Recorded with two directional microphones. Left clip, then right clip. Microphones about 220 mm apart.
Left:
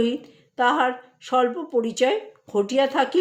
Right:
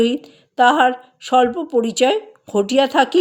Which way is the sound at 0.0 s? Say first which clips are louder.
Right 6 dB; 45° right (ahead or behind).